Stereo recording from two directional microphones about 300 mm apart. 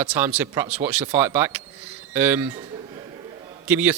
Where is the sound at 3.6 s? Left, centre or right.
Centre.